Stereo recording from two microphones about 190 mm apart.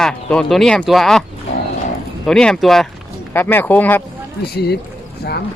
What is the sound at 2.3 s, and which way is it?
Speech, 5° left (ahead or behind).